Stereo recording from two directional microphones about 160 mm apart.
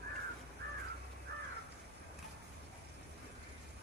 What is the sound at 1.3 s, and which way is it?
Crow, 90° right.